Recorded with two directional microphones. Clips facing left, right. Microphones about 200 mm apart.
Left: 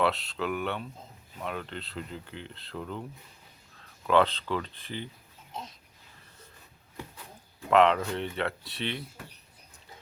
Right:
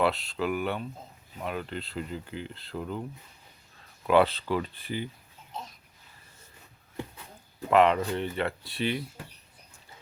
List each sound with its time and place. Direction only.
0.0 s speech: centre (ahead or behind)
4.0 s speech: 10° right (ahead or behind)
7.7 s speech: 5° right (ahead or behind)